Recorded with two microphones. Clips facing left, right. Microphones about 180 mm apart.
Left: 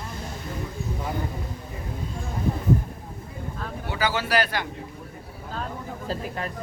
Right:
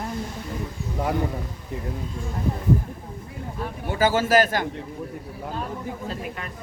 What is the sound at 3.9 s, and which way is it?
Speech, 45° right (ahead or behind).